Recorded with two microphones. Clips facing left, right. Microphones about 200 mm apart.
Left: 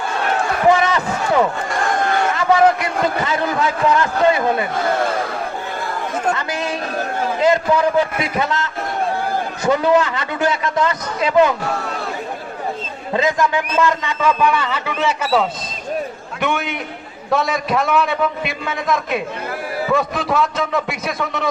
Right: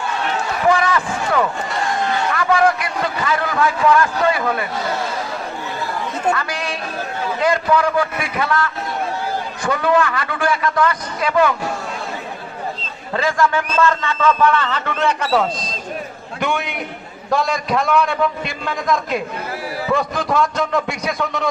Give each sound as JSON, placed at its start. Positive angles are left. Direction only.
{"t": 0.7, "sound": "basketball bounce", "side_deg": 20}
{"t": 1.8, "sound": "a sound", "side_deg": 50}
{"t": 2.3, "sound": "a man's voice", "side_deg": 20}
{"t": 4.9, "sound": "speech", "side_deg": 55}
{"t": 6.3, "sound": "a man's voice", "side_deg": 20}
{"t": 13.1, "sound": "a man's voice", "side_deg": 20}